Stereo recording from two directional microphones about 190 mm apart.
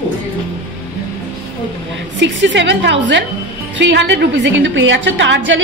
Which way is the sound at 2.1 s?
70° right (ahead or behind).